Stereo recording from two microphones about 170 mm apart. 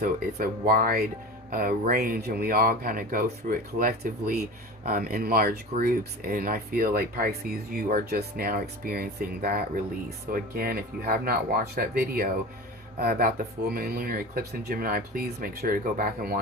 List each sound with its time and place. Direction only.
0.0 s speech: 60° right (ahead or behind)